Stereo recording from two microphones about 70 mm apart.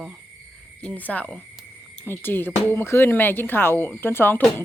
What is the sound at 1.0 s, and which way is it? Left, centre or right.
Speech, left.